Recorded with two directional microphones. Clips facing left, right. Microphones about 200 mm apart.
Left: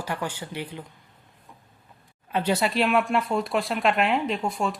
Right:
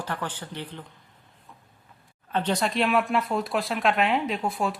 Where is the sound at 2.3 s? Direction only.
10° left (ahead or behind).